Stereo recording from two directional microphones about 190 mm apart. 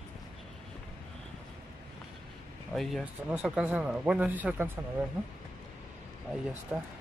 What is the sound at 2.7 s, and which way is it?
Speech, centre (ahead or behind).